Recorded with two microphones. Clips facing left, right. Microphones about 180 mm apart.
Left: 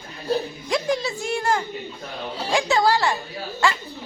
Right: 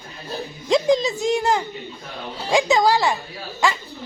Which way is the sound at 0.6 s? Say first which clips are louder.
Right 8 dB; 20° right (ahead or behind).